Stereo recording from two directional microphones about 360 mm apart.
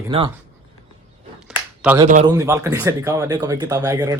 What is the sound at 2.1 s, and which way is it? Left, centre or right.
Speech, centre.